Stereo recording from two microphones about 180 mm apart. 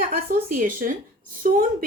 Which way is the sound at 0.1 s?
50° right (ahead or behind).